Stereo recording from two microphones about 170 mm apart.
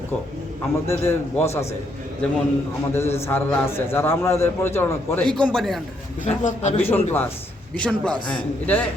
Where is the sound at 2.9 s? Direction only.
15° left (ahead or behind).